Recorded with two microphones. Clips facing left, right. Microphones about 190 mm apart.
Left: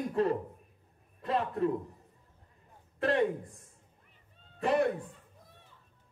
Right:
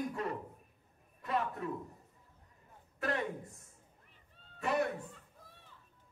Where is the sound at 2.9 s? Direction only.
30° left (ahead or behind).